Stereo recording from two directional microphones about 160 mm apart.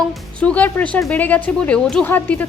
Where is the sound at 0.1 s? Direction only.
5° left (ahead or behind).